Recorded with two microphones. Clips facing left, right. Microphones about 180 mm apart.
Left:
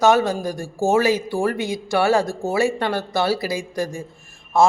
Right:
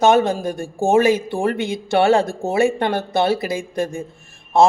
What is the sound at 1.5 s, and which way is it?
Speech, 60° right (ahead or behind).